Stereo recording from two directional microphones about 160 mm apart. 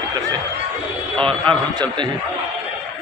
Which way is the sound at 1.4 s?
30° right (ahead or behind).